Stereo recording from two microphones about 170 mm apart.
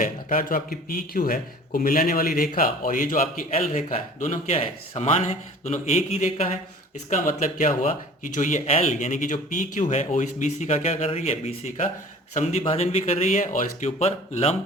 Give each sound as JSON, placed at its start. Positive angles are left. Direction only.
{"t": 0.0, "sound": "a man's voice", "side_deg": 55}
{"t": 7.1, "sound": "speech", "side_deg": 50}